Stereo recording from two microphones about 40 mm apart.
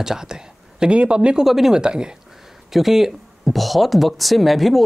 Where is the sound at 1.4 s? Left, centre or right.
Centre.